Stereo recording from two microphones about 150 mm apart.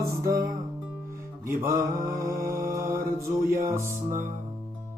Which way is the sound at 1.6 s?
15° right (ahead or behind).